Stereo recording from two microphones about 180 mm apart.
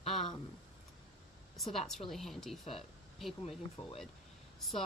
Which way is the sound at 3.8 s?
25° left (ahead or behind).